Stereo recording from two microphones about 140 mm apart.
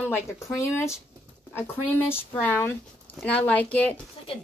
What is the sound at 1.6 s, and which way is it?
A woman's voice, 15° left (ahead or behind).